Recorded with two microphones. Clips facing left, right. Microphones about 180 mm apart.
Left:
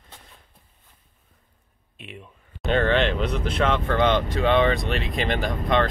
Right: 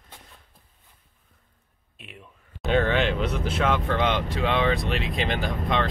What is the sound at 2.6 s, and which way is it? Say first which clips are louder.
Speech: left 1 dB; 5° right (ahead or behind).